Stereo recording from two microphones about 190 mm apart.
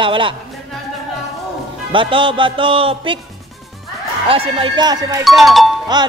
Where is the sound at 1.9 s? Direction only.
25° right (ahead or behind).